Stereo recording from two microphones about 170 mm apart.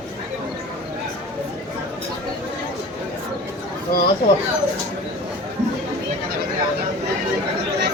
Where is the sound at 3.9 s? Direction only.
60° left (ahead or behind).